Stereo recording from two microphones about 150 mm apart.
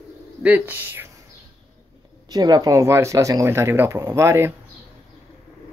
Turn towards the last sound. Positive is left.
turn(degrees=-15)  # may be behind; listen again after turning